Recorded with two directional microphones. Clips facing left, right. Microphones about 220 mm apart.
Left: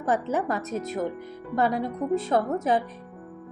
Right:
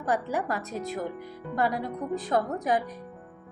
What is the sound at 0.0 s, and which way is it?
A woman's voice, 20° left (ahead or behind).